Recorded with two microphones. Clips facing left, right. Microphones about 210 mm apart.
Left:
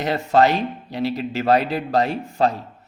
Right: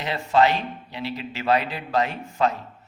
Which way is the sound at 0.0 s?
45° left (ahead or behind).